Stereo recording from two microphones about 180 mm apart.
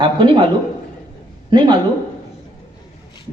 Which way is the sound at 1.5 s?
25° right (ahead or behind).